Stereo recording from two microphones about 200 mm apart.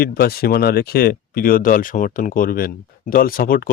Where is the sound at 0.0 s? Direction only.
50° left (ahead or behind).